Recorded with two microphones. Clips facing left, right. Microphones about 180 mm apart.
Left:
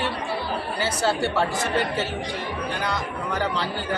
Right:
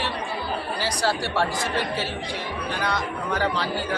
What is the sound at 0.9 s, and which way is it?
Speech, 20° left (ahead or behind).